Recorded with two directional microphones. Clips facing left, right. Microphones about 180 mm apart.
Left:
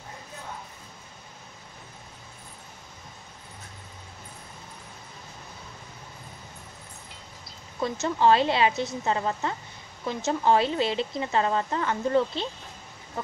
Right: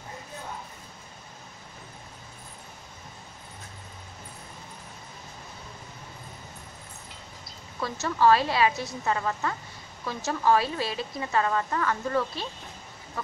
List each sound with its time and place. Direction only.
7.8 s a woman's voice: 20° left (ahead or behind)